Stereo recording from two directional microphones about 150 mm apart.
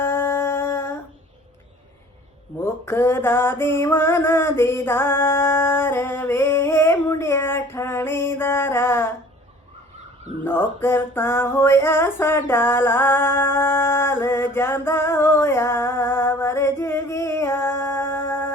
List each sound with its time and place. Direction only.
0.0 s music: 15° left (ahead or behind)
2.6 s mantra: 15° left (ahead or behind)
10.4 s music: 15° left (ahead or behind)